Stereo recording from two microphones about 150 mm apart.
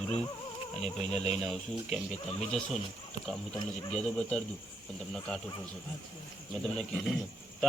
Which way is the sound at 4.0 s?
5° left (ahead or behind).